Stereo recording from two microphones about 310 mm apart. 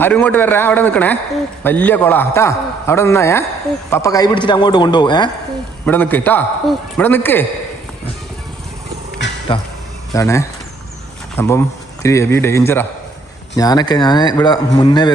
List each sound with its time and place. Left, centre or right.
0.0 s a man's voice: centre
9.5 s a man's voice: centre